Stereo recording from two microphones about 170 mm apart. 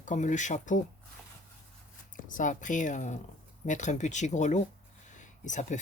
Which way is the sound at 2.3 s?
50° left (ahead or behind).